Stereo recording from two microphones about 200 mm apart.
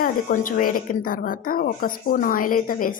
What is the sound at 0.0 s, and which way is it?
A woman's voice, 45° left (ahead or behind).